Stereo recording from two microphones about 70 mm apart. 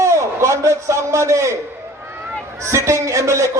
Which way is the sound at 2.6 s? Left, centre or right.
Right.